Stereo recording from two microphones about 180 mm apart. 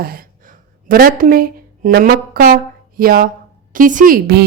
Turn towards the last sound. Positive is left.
turn(degrees=-50)  # may be behind; listen again after turning